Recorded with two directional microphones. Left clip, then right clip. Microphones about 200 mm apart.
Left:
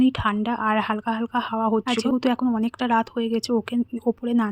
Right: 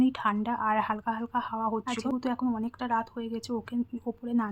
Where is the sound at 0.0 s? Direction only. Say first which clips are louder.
Left 5 dB; 30° left (ahead or behind).